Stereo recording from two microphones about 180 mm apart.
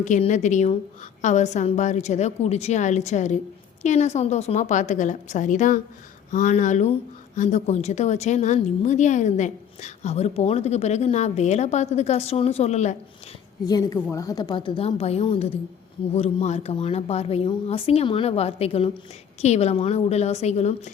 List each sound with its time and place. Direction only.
0.0 s a woman's voice: 40° left (ahead or behind)
13.7 s a woman's voice: 20° left (ahead or behind); by 20.9 s 40° left (ahead or behind)